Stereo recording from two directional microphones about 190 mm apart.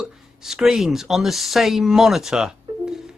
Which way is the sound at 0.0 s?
Centre (ahead or behind).